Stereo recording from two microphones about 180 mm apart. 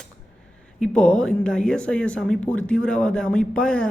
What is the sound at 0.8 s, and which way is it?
Speech, 5° left (ahead or behind).